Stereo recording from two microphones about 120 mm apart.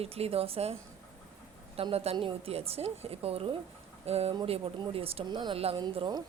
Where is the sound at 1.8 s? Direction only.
55° right (ahead or behind).